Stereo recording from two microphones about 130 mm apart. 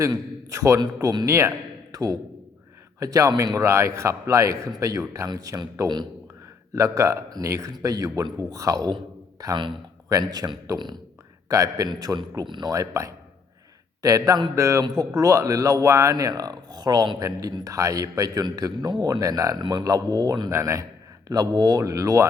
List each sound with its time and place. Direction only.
0.0 s a man's voice: 25° right (ahead or behind)
12.7 s speech: 25° right (ahead or behind)